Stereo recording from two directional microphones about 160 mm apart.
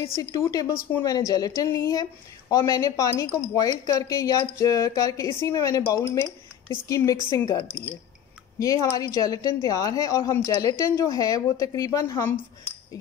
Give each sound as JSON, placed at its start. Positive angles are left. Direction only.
{"t": 0.0, "sound": "a woman's voice", "side_deg": 15}